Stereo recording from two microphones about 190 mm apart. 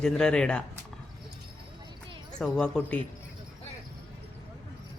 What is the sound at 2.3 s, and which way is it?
Speech, 5° left (ahead or behind).